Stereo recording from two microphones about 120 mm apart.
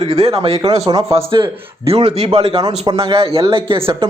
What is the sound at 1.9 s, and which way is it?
Speech, 60° right (ahead or behind).